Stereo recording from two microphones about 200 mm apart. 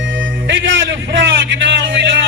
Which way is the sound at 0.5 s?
65° right (ahead or behind).